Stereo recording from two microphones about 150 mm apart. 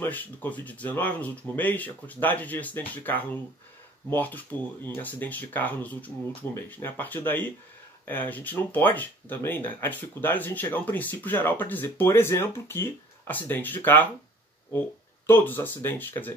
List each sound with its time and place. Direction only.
0.0 s speech: 10° left (ahead or behind)
15.2 s speech: 15° left (ahead or behind)